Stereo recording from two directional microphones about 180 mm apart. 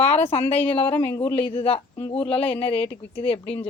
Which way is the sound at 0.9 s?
10° left (ahead or behind).